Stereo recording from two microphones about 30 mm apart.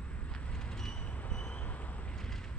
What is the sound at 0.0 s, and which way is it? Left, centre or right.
Vehicle, left.